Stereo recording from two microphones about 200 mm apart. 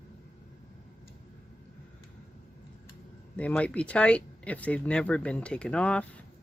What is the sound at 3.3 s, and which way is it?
Speech, 5° left (ahead or behind).